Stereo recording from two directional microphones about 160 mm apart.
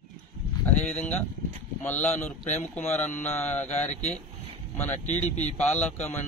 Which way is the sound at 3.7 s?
45° left (ahead or behind).